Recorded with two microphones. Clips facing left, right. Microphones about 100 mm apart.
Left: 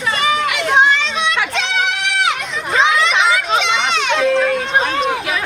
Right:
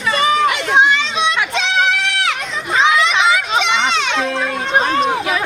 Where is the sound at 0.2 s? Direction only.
35° right (ahead or behind).